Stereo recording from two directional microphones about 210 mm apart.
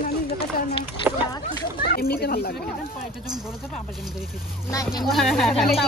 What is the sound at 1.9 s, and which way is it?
Speech, 50° left (ahead or behind).